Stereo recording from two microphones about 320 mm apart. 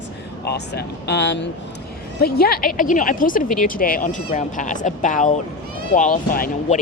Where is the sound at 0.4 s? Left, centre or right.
Left.